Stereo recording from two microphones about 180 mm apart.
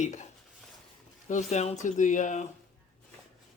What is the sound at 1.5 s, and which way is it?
Speech, 40° left (ahead or behind).